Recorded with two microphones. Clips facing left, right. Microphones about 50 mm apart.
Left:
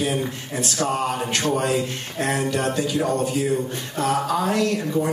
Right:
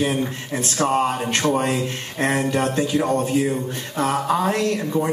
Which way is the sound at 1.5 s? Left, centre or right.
Right.